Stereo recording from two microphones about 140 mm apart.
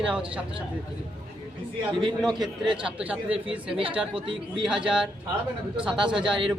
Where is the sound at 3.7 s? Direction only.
40° right (ahead or behind).